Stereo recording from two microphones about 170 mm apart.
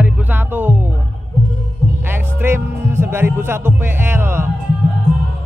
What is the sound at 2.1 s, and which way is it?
Music, 10° right (ahead or behind).